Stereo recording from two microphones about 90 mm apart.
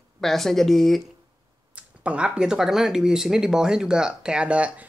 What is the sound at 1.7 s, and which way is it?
Speech, 15° right (ahead or behind).